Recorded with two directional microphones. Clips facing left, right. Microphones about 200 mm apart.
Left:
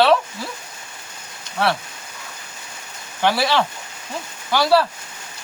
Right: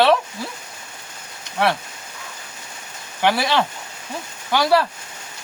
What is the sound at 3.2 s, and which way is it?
Speech, 15° right (ahead or behind).